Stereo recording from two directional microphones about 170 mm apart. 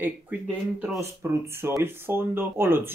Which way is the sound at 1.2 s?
15° right (ahead or behind).